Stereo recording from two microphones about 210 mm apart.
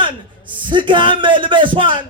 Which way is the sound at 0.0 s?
25° right (ahead or behind).